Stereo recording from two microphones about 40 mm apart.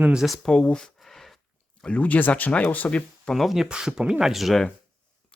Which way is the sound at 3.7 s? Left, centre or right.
Centre.